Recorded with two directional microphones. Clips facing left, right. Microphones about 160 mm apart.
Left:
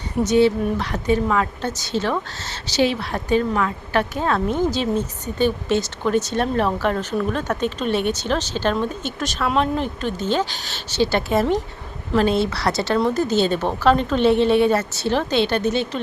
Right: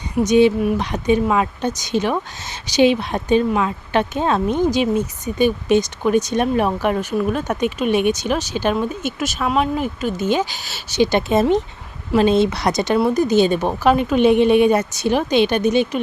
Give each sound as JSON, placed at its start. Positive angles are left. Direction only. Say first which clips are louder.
{"t": 0.2, "sound": "speech", "louder": "right 3 dB", "side_deg": -15}